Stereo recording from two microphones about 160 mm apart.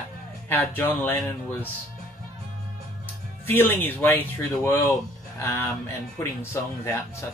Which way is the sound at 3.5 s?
15° left (ahead or behind).